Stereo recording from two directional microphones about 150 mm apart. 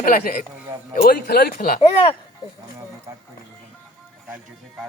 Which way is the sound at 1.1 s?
90° left.